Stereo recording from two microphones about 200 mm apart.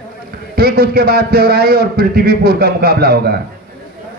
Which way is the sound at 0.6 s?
50° right (ahead or behind).